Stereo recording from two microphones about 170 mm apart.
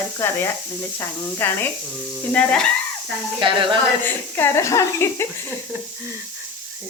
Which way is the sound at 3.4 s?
30° right (ahead or behind).